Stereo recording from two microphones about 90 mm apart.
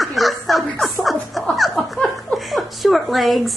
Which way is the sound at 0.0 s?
Centre (ahead or behind).